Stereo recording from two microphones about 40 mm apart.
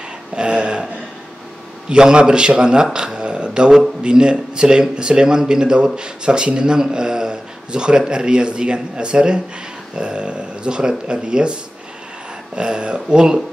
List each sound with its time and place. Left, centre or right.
0.4 s speech: right
1.9 s a man's voice: right
12.5 s speech: right